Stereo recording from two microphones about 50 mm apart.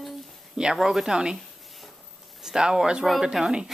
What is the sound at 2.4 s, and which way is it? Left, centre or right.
Speech, centre.